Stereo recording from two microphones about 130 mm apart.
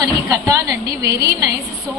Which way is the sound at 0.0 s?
25° right (ahead or behind).